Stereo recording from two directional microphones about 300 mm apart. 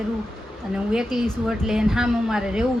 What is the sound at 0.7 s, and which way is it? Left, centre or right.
A woman's voice, centre.